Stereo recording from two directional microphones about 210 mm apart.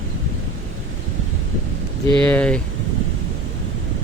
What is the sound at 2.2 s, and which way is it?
Speech, 5° left (ahead or behind).